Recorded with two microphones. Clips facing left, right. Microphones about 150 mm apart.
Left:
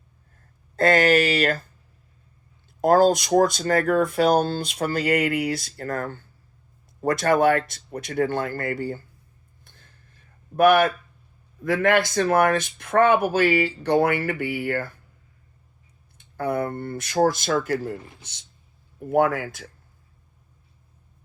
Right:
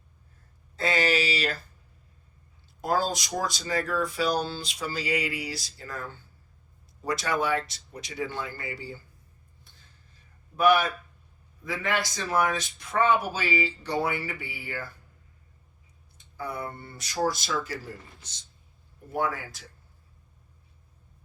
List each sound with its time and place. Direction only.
0.8 s speech: 50° left (ahead or behind)
2.8 s speech: 50° left (ahead or behind)
9.6 s a sound: 55° left (ahead or behind)
10.6 s speech: 55° left (ahead or behind)
16.1 s speech: 60° left (ahead or behind)